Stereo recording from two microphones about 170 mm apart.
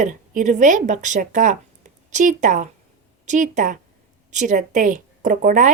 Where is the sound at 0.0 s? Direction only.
45° right (ahead or behind).